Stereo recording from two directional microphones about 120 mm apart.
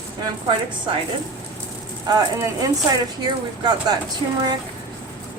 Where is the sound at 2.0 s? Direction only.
30° right (ahead or behind).